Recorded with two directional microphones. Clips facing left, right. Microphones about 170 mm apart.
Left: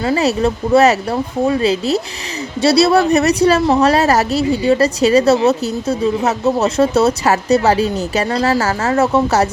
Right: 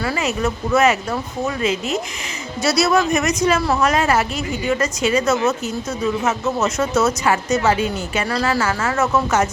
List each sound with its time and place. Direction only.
0.2 s a woman's voice: 35° left (ahead or behind)